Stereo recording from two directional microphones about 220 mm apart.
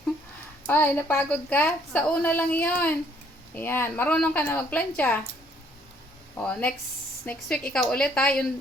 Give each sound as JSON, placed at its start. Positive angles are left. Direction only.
{"t": 0.7, "sound": "a woman's voice", "side_deg": 10}
{"t": 6.3, "sound": "a woman's voice", "side_deg": 5}